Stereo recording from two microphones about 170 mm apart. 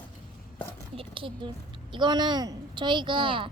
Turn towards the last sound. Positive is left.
turn(degrees=-30)  # may be behind; listen again after turning